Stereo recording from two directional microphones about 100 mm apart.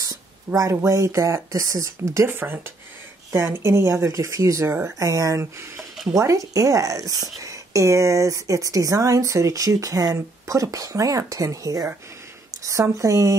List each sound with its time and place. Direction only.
0.6 s a woman's voice: 30° right (ahead or behind)
2.2 s a woman's voice: 20° right (ahead or behind)